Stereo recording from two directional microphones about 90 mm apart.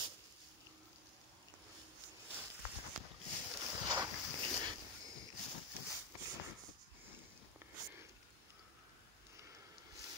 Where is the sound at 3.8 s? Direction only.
45° right (ahead or behind).